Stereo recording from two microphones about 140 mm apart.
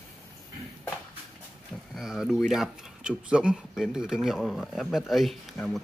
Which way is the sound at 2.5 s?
5° right (ahead or behind).